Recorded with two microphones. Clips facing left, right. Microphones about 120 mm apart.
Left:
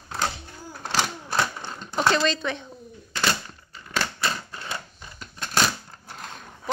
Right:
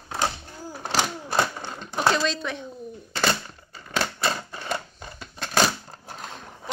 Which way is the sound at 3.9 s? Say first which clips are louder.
Right 2 dB; 15° right (ahead or behind).